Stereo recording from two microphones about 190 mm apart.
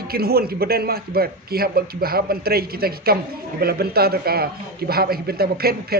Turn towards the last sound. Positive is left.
turn(degrees=-55)  # may be behind; listen again after turning